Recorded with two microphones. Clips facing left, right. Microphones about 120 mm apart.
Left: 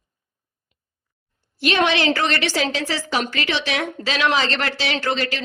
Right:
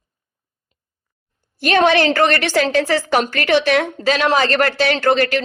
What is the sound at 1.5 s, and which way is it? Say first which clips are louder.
A woman's voice: right 5 dB; 45° right (ahead or behind).